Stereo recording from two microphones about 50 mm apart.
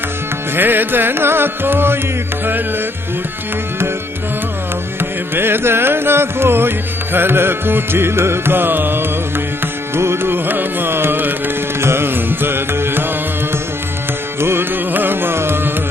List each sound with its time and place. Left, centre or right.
0.6 s music: right
5.3 s music: right
9.9 s carnatic music: right
11.8 s music: right
14.4 s carnatic music: right
14.9 s carnatic music: right